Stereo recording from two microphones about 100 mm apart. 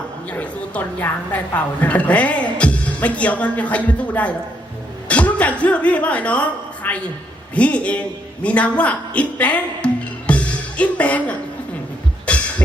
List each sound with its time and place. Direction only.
0.3 s a woman's voice: 15° left (ahead or behind)
12.2 s cough: 15° left (ahead or behind)